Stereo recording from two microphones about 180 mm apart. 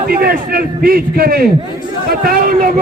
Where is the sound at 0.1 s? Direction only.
55° right (ahead or behind).